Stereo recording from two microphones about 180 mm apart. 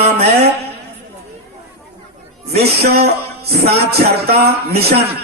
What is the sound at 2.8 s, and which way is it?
Music, 60° right (ahead or behind).